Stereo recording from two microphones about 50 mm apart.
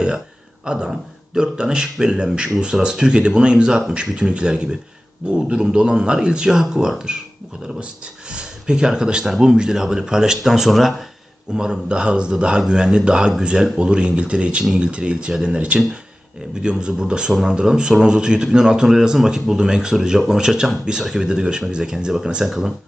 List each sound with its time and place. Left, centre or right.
0.6 s speech: centre
8.3 s speech: centre